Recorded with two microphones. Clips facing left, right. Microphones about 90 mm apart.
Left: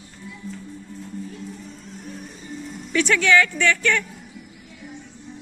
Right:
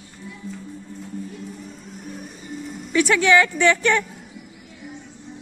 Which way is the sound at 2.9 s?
15° right (ahead or behind).